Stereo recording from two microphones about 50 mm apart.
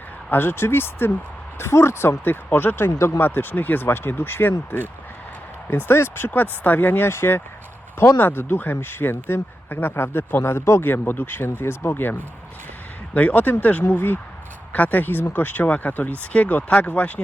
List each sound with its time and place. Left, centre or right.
0.3 s speech: left
1.5 s speech: left
3.8 s speech: left
7.1 s speech: left
13.1 s speech: left
13.8 s speech: left
14.7 s speech: left